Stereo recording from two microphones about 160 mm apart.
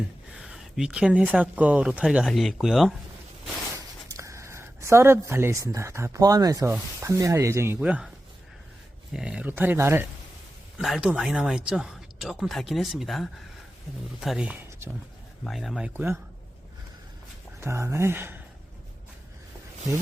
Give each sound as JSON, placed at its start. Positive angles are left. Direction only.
{"t": 0.3, "sound": "speech", "side_deg": -5}
{"t": 4.1, "sound": "speech", "side_deg": -20}
{"t": 9.1, "sound": "speech", "side_deg": -5}
{"t": 10.8, "sound": "speech", "side_deg": 0}
{"t": 17.6, "sound": "speech", "side_deg": -15}